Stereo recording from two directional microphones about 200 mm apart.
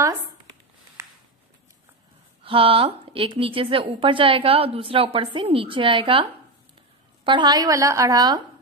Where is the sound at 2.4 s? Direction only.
25° right (ahead or behind).